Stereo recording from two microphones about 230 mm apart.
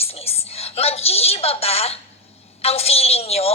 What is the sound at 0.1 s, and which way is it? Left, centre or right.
Whispering, left.